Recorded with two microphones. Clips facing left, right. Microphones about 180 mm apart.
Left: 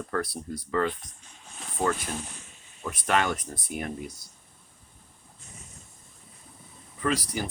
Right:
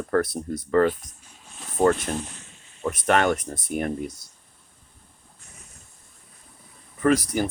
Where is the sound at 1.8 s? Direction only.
55° right (ahead or behind).